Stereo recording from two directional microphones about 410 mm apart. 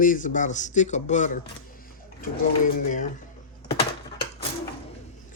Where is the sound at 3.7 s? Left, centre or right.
Centre.